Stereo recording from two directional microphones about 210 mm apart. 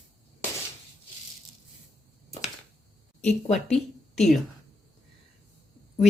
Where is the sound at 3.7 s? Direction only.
Centre (ahead or behind).